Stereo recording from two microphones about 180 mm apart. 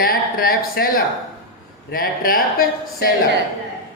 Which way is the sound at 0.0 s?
55° left (ahead or behind).